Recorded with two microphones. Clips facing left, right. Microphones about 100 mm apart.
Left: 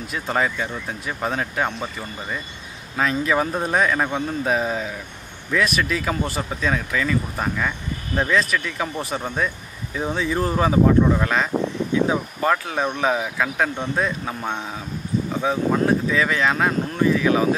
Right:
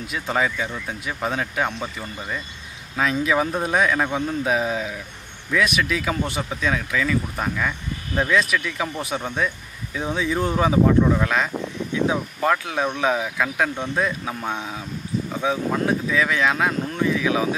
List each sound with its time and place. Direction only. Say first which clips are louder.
0.0 s speech: even; centre (ahead or behind)